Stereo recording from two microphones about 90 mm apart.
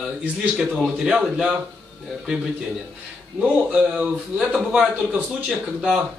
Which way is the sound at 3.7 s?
10° right (ahead or behind).